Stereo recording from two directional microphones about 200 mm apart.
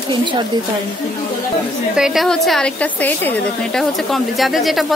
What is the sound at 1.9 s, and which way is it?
A woman's voice, centre (ahead or behind).